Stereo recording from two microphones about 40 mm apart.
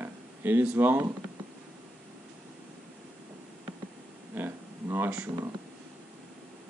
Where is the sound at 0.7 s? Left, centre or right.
Right.